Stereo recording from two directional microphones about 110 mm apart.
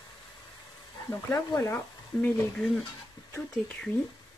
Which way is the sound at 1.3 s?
25° left (ahead or behind).